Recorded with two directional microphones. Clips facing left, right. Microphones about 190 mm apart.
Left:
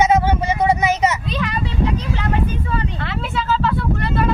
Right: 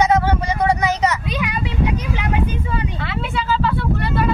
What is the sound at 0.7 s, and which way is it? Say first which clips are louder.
Vehicle: left 1 dB; 20° left (ahead or behind).